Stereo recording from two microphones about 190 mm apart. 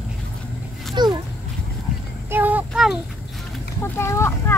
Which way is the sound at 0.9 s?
20° right (ahead or behind).